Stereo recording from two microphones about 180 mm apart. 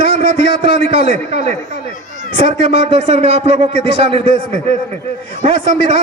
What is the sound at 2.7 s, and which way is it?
A man's voice, 35° right (ahead or behind).